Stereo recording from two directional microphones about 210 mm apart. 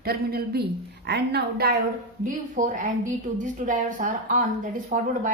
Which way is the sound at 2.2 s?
40° right (ahead or behind).